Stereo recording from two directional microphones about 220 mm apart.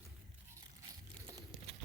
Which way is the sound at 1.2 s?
20° right (ahead or behind).